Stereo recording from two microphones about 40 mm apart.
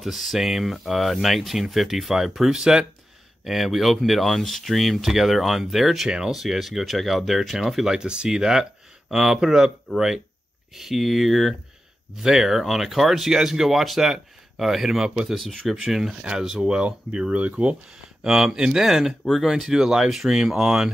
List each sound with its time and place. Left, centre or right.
0.0 s speech: centre
3.4 s speech: centre
6.0 s speech: right
6.3 s speech: centre
15.0 s speech: centre
16.2 s speech: right
18.2 s speech: centre
18.8 s speech: centre